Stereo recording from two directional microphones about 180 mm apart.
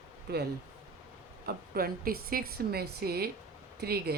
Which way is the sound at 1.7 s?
55° right (ahead or behind).